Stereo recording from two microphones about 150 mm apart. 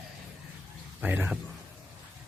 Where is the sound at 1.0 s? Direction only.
10° right (ahead or behind).